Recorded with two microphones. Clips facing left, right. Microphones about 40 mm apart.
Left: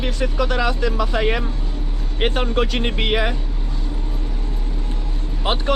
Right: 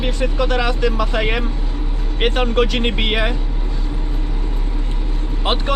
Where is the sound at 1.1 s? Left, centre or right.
Right.